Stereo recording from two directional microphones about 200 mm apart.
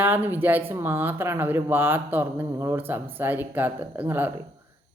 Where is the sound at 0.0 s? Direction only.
10° right (ahead or behind).